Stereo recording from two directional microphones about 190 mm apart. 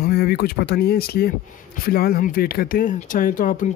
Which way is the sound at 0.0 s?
55° left (ahead or behind).